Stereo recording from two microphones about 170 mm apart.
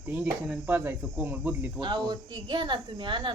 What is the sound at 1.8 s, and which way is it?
Speech, 25° right (ahead or behind).